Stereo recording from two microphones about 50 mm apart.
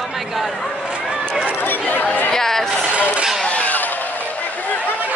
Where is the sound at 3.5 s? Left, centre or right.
Left.